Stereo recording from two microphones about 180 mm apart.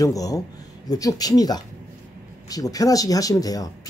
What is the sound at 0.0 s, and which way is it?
Speech, 20° left (ahead or behind).